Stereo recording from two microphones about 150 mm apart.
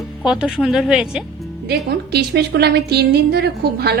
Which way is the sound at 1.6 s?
90° right.